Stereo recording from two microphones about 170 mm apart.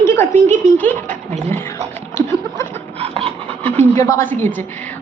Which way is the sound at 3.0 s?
35° right (ahead or behind).